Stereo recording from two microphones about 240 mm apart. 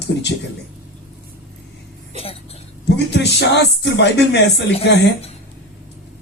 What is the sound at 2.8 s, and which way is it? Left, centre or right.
Speech, left.